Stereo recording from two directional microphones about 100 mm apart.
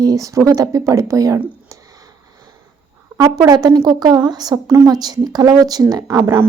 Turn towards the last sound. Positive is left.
turn(degrees=-25)  # may be behind; listen again after turning